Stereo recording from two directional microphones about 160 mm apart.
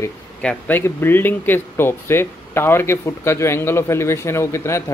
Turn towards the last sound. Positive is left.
turn(degrees=15)  # may be behind; listen again after turning